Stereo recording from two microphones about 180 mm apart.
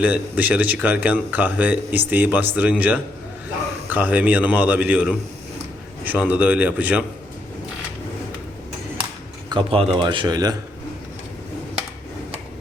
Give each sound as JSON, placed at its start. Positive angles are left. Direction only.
{"t": 0.0, "sound": "speech", "side_deg": -10}
{"t": 9.5, "sound": "speech", "side_deg": -30}